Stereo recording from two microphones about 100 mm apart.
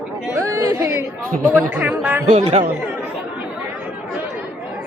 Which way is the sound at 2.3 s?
90° right.